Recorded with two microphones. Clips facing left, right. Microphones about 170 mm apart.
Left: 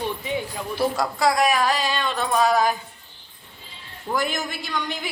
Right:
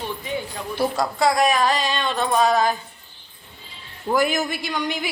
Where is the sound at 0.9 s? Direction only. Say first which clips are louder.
Right 3 dB; 5° left (ahead or behind).